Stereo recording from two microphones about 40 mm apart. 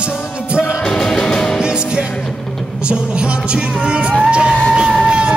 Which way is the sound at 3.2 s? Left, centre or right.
Right.